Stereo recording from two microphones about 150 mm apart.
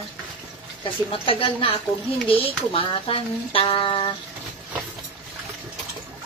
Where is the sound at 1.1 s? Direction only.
35° left (ahead or behind).